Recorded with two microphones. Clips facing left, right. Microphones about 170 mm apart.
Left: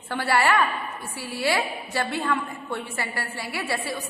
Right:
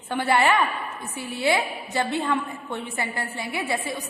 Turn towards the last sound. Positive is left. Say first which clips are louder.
# right 2 dB
turn(degrees=-20)  # may be behind; listen again after turning